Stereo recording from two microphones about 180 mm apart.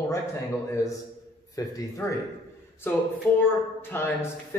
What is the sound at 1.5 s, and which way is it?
Speech, 20° left (ahead or behind).